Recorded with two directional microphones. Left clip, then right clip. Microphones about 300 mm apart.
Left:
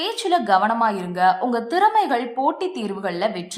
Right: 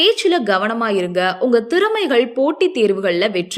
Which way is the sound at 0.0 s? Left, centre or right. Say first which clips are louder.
Right 6 dB; centre.